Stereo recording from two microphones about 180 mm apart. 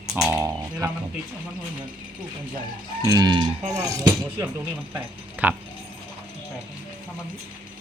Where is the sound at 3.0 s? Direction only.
20° right (ahead or behind).